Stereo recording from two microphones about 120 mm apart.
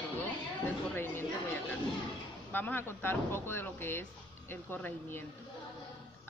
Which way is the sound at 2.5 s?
15° left (ahead or behind).